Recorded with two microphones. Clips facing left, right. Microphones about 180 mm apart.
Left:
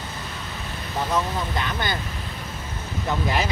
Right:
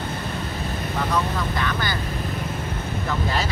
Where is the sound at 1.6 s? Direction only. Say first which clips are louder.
Right 1 dB; 25° left (ahead or behind).